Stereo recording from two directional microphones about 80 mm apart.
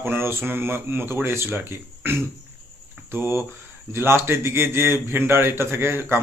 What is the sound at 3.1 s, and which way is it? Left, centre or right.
A man's voice, right.